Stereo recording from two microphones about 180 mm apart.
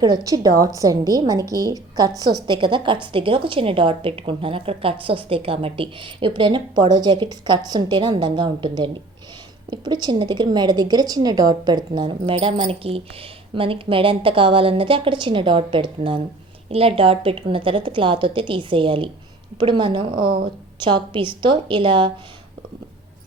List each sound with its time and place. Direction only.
0.0 s a woman's voice: 20° right (ahead or behind)